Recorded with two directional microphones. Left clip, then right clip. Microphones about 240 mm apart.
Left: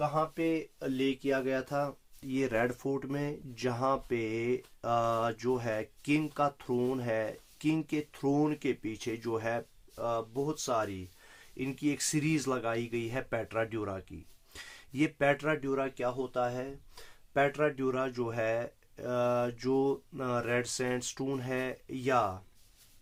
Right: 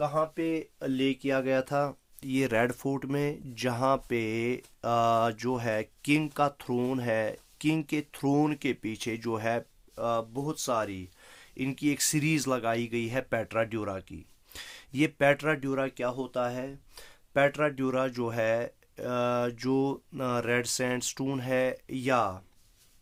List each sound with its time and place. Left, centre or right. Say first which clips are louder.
0.0 s speech: right 2 dB; right